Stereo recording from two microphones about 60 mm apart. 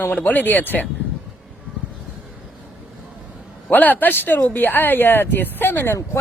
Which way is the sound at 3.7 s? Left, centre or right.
Left.